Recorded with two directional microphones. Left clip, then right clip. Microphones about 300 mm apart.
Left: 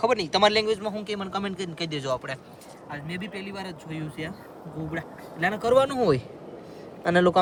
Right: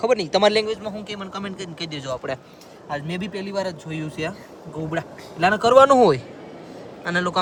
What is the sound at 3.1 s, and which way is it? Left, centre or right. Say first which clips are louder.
Speech: right 6 dB; centre.